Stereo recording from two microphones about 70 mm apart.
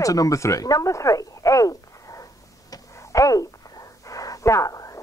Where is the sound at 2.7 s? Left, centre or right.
Left.